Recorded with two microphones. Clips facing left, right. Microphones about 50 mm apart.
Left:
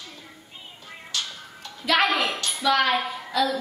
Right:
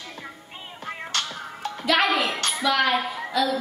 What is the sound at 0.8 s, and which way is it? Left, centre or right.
Music, right.